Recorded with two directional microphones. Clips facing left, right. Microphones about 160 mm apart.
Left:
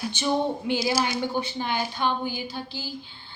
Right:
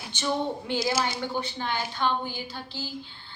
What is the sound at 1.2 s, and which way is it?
A woman's voice, 15° left (ahead or behind).